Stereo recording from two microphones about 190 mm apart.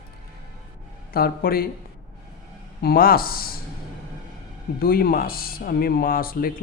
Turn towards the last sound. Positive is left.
turn(degrees=50)  # may be behind; listen again after turning